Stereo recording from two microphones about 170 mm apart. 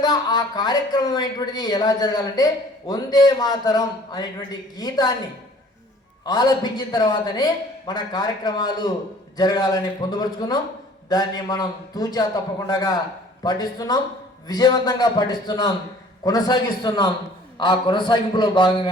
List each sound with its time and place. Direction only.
0.0 s a man's voice: 25° left (ahead or behind)
6.2 s a man's voice: 25° left (ahead or behind)